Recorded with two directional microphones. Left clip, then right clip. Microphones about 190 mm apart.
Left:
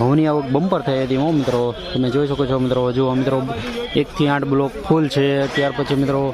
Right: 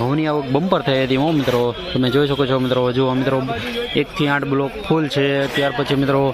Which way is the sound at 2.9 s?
15° left (ahead or behind).